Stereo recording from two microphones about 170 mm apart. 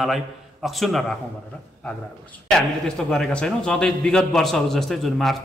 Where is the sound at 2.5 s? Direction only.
5° left (ahead or behind).